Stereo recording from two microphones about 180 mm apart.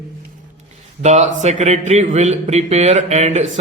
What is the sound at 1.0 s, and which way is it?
Mantra, 40° right (ahead or behind).